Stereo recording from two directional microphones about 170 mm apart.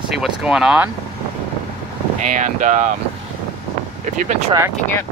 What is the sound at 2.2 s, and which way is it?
Speech, 45° right (ahead or behind).